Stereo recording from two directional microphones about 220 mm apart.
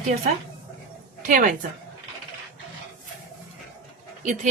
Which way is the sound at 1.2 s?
35° right (ahead or behind).